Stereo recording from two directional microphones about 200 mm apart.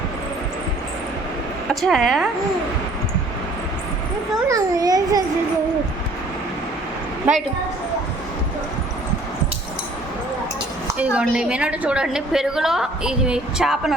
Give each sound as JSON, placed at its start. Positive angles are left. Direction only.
{"t": 1.7, "sound": "a woman's voice", "side_deg": 0}
{"t": 4.4, "sound": "a child's voice", "side_deg": -15}
{"t": 10.8, "sound": "a woman's voice", "side_deg": -5}